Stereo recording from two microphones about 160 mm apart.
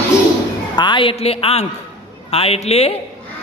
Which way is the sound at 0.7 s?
30° left (ahead or behind).